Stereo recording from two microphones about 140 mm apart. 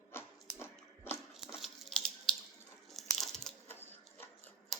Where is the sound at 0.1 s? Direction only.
15° left (ahead or behind).